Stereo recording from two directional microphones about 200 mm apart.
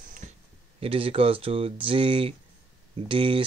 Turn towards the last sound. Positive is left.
turn(degrees=-25)  # may be behind; listen again after turning